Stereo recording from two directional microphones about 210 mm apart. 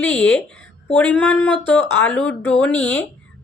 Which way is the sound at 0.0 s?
5° left (ahead or behind).